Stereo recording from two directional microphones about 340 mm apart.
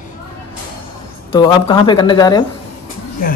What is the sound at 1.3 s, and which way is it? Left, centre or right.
Speech, centre.